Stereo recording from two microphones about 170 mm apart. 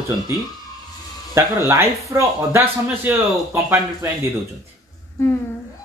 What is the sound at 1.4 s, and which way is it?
Speech, 15° right (ahead or behind).